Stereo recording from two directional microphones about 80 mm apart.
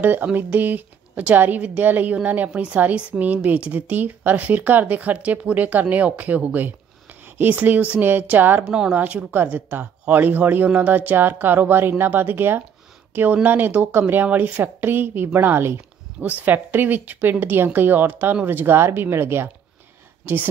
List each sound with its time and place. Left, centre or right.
0.0 s a woman's voice: right
8.6 s speech: centre
8.9 s a woman's voice: centre